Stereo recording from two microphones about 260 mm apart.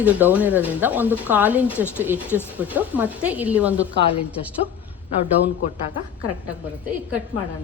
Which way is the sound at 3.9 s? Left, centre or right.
Left.